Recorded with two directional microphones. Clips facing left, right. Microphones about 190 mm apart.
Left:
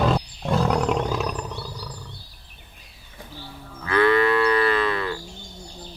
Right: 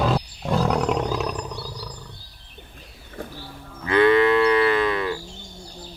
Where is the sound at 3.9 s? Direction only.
20° right (ahead or behind).